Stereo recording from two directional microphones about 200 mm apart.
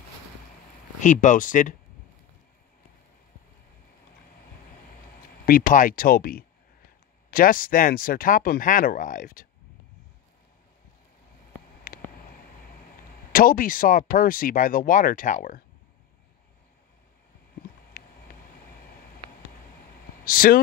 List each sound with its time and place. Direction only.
1.0 s speech: 40° left (ahead or behind)
5.4 s speech: 45° left (ahead or behind)
11.9 s a sound: 45° left (ahead or behind)
13.3 s speech: 45° left (ahead or behind)
20.2 s speech: 45° left (ahead or behind)